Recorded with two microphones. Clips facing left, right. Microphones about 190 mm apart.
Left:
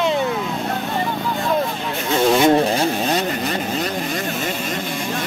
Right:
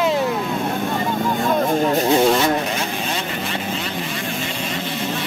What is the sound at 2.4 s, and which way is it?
Vehicle, 35° left (ahead or behind).